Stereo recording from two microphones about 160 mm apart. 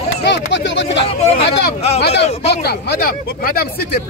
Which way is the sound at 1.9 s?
90° left.